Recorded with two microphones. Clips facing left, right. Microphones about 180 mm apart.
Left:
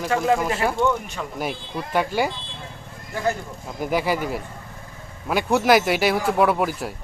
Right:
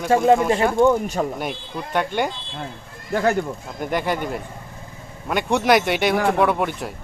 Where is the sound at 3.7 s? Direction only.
5° left (ahead or behind).